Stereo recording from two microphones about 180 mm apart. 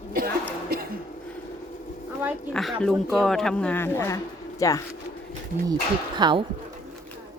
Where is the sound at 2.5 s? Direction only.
5° left (ahead or behind); by 4.8 s 20° left (ahead or behind).